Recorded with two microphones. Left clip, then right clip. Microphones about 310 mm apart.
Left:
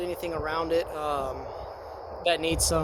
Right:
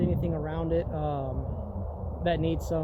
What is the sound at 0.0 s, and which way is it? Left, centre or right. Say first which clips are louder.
Speech: left 1 dB; centre.